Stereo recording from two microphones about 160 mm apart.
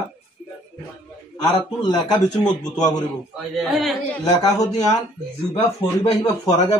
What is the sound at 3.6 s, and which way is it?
Speech, centre (ahead or behind).